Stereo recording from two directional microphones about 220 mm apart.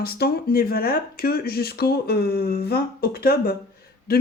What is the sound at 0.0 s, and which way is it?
Speech, 45° left (ahead or behind).